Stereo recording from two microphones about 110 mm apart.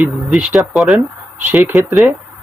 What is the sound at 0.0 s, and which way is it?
Speech, 10° right (ahead or behind).